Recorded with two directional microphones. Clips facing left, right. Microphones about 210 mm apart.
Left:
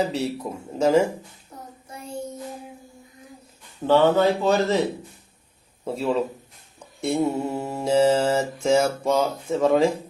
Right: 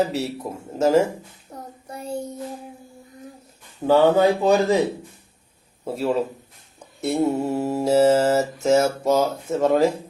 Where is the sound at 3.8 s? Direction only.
10° right (ahead or behind).